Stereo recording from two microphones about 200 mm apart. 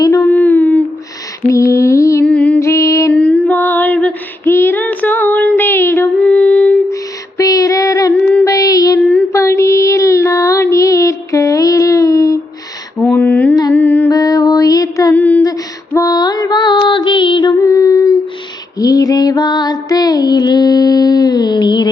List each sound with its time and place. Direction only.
0.0 s a sound: 15° left (ahead or behind)
1.5 s lullaby: 15° left (ahead or behind)
2.2 s music: 5° left (ahead or behind)
3.1 s female singing: 5° left (ahead or behind)
8.3 s child singing: 10° left (ahead or behind)
13.0 s a sound: 10° left (ahead or behind)
13.7 s music: 10° left (ahead or behind)